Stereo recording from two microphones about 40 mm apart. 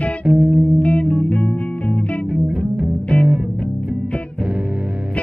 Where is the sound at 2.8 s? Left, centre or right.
Right.